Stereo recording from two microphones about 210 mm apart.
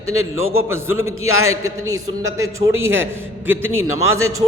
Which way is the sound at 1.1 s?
85° right.